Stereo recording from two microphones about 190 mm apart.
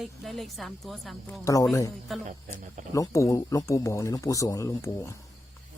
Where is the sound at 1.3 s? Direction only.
15° left (ahead or behind).